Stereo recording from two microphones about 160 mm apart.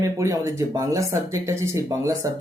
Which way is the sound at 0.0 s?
20° right (ahead or behind).